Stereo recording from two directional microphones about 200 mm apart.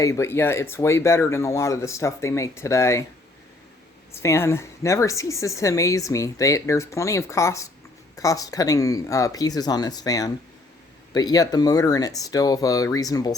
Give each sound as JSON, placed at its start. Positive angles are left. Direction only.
{"t": 0.0, "sound": "a woman's voice", "side_deg": 15}
{"t": 4.1, "sound": "a woman's voice", "side_deg": 15}